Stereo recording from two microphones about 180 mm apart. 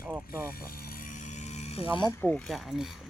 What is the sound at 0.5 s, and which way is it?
Vehicle, 55° left (ahead or behind).